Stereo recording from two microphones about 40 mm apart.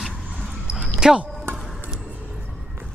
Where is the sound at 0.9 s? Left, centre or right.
Right.